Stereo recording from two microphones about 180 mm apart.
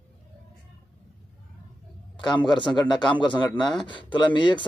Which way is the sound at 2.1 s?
25° left (ahead or behind).